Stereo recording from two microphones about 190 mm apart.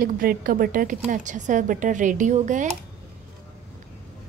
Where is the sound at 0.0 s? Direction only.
50° right (ahead or behind).